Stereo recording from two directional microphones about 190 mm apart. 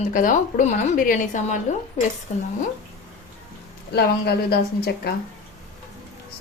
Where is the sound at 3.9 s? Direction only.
60° left (ahead or behind).